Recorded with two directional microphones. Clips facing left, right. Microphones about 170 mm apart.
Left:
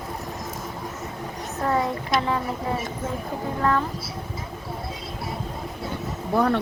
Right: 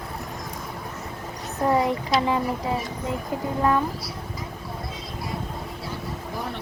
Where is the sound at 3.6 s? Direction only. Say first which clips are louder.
Right 1 dB; 15° right (ahead or behind).